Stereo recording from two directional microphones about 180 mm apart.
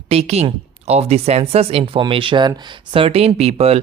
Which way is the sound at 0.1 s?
35° right (ahead or behind).